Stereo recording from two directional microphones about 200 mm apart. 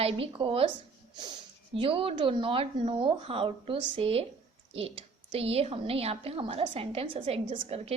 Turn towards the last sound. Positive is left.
turn(degrees=-30)  # may be behind; listen again after turning